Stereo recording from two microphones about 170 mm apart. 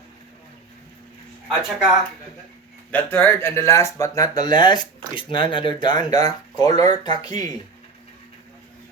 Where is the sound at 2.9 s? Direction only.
10° left (ahead or behind).